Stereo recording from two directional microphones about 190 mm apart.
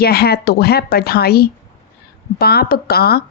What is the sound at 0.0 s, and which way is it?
A woman's voice, 55° left (ahead or behind).